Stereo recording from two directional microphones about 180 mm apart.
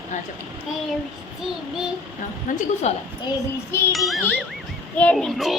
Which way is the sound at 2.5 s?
45° left (ahead or behind).